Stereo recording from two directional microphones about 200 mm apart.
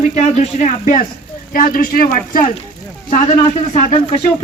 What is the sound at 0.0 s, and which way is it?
Speech, 35° left (ahead or behind).